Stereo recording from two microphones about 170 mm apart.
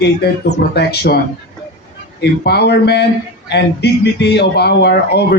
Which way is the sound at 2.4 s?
75° left (ahead or behind).